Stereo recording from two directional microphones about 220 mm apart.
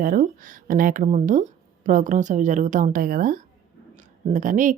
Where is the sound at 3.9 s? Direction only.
35° right (ahead or behind).